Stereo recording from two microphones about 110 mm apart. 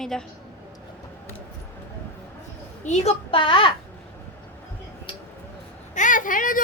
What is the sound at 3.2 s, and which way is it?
Speech, 55° left (ahead or behind).